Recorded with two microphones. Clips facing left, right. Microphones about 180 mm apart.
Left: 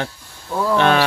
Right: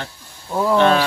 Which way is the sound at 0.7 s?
65° left (ahead or behind).